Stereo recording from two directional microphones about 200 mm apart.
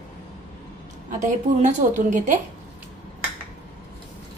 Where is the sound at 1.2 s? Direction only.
35° right (ahead or behind).